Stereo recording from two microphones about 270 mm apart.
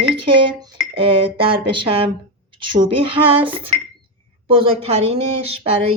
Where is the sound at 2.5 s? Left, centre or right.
Right.